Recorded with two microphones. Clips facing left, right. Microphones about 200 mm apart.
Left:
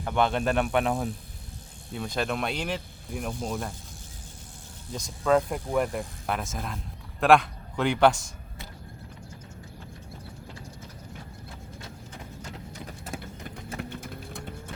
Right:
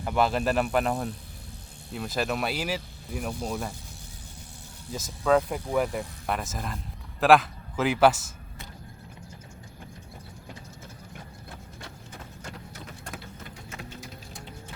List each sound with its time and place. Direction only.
0.0 s speech: 5° right (ahead or behind)
4.9 s a man's voice: 5° right (ahead or behind)
13.7 s a sound: 60° left (ahead or behind)